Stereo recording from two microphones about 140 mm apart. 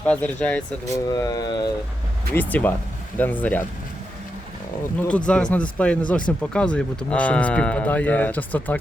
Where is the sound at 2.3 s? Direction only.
10° left (ahead or behind).